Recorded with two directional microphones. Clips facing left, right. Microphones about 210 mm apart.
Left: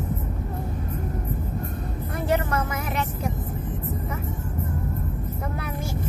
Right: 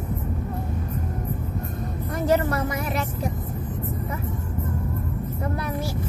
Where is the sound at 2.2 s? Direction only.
35° right (ahead or behind).